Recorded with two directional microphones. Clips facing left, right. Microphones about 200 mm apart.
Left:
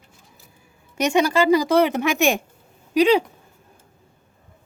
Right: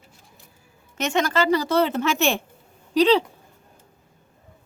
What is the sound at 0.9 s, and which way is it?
A woman's voice, 10° left (ahead or behind).